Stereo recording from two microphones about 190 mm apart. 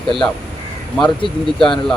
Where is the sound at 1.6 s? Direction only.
5° left (ahead or behind).